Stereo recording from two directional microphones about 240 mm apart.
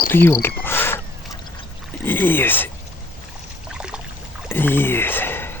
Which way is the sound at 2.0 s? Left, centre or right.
Centre.